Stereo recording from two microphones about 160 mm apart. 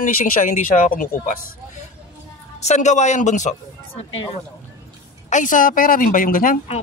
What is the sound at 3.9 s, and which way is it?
Speech, 40° left (ahead or behind).